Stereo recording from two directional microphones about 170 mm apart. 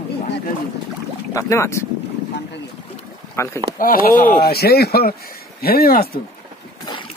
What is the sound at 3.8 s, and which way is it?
Speech, 55° left (ahead or behind).